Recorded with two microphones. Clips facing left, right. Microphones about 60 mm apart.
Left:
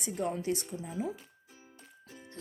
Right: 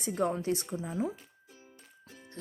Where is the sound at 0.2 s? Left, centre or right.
Right.